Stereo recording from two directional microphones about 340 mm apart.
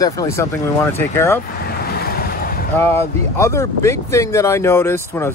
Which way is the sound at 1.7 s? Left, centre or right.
Left.